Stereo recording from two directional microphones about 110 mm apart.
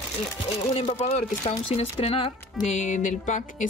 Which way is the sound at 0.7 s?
65° left (ahead or behind).